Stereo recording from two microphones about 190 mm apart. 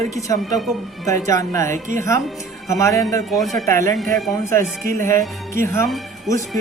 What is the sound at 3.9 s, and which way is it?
Speech, centre (ahead or behind).